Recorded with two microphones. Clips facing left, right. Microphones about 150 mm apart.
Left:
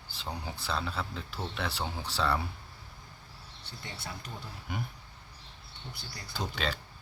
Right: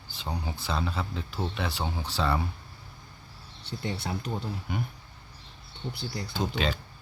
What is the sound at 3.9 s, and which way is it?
Speech, 65° right (ahead or behind).